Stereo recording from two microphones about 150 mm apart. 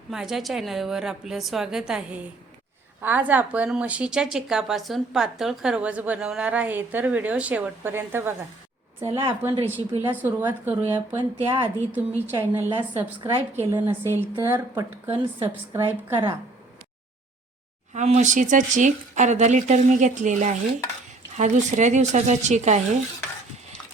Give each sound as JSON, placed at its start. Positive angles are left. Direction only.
{"t": 0.1, "sound": "a woman's voice", "side_deg": -5}
{"t": 9.4, "sound": "a woman's voice", "side_deg": -15}
{"t": 11.4, "sound": "a woman's voice", "side_deg": -35}
{"t": 11.9, "sound": "a woman's voice", "side_deg": -15}
{"t": 17.9, "sound": "speech", "side_deg": -50}